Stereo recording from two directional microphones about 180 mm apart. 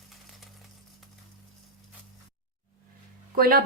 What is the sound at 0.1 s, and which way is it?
Typewriter, centre (ahead or behind).